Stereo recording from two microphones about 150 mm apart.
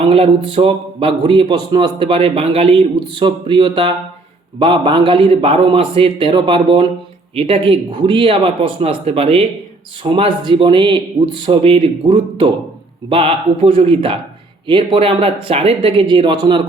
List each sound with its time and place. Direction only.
0.0 s a man's voice: 40° right (ahead or behind)